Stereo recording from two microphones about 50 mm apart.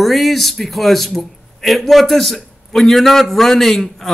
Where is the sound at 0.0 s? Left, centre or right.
Centre.